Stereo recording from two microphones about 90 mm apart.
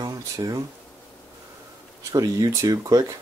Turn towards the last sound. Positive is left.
turn(degrees=-45)  # may be behind; listen again after turning